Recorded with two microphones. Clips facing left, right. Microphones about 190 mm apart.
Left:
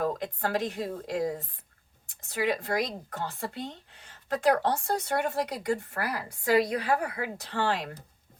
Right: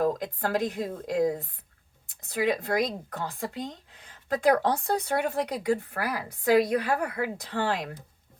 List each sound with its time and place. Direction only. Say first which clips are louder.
0.0 s speech: right 3 dB; 45° right (ahead or behind)
5.9 s speech: right 2 dB; 45° right (ahead or behind)